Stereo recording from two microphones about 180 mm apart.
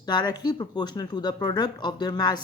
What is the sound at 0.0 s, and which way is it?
Speech, 25° left (ahead or behind).